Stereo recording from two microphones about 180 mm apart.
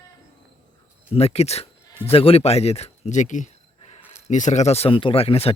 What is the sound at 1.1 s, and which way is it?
Speech, 35° left (ahead or behind).